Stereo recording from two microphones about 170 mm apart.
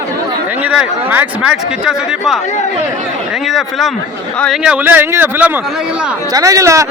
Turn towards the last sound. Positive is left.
turn(degrees=-20)  # may be behind; listen again after turning